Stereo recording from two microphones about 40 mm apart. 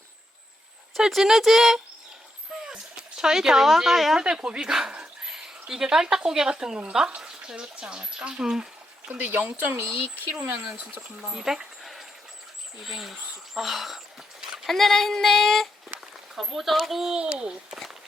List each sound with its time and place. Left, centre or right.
1.1 s speech: centre
2.6 s speech: centre
4.2 s speech: right
9.0 s speech: right
9.7 s speech: right
10.3 s speech: right
11.2 s speech: centre
14.4 s a sound: centre
14.7 s speech: centre
17.2 s speech: right